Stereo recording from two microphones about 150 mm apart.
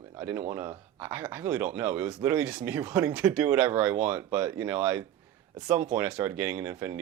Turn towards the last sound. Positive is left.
turn(degrees=-15)  # may be behind; listen again after turning